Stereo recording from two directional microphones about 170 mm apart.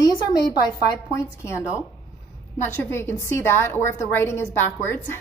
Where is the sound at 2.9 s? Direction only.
15° left (ahead or behind).